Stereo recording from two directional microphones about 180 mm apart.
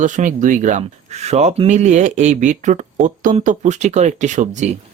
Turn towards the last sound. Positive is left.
turn(degrees=-40)  # may be behind; listen again after turning